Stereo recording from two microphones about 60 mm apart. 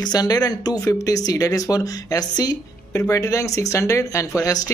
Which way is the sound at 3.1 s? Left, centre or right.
Left.